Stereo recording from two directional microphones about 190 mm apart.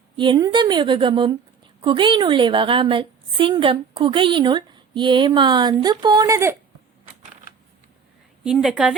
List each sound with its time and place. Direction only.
0.2 s a woman's voice: 20° right (ahead or behind)
8.4 s a woman's voice: 5° right (ahead or behind)